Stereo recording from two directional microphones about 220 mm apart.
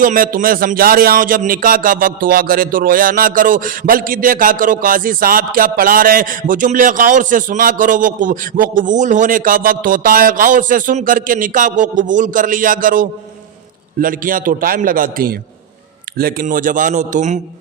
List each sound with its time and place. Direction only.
0.0 s speech: 40° right (ahead or behind)